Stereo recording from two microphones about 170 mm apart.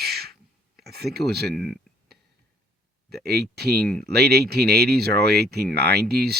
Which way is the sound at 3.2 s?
70° right (ahead or behind).